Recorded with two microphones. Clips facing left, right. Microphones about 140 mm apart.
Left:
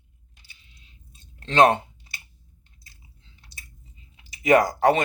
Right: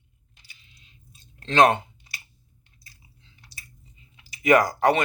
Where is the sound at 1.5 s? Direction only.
30° left (ahead or behind).